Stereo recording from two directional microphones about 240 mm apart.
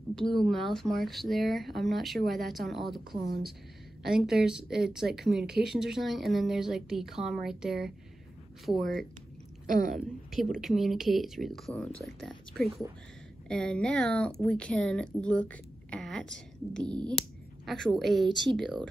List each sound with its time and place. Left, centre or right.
0.1 s speech: centre
9.7 s a woman's voice: right
10.6 s a woman's voice: centre